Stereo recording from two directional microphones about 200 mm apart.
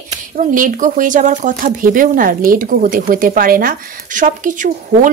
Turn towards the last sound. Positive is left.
turn(degrees=-40)  # may be behind; listen again after turning